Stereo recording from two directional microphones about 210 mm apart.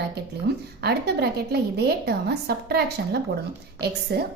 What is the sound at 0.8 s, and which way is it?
A woman's voice, 50° right (ahead or behind).